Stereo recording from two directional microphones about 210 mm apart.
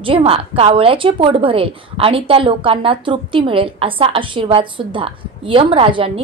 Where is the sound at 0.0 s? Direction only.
25° right (ahead or behind).